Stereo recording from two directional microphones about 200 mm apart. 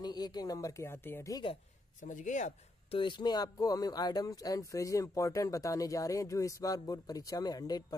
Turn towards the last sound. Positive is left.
turn(degrees=20)  # may be behind; listen again after turning